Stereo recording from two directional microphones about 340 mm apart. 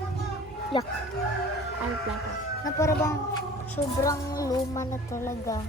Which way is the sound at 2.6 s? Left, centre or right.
Centre.